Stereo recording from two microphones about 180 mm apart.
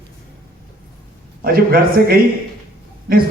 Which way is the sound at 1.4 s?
55° right (ahead or behind).